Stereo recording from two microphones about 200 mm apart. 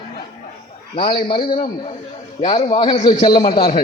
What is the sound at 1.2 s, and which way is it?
A man's voice, 25° left (ahead or behind).